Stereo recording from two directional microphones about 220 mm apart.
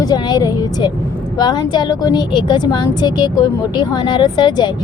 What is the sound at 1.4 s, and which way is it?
A woman's voice, 20° left (ahead or behind).